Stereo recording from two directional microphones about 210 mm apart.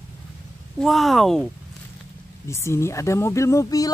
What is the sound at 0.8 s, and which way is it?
Speech, centre (ahead or behind).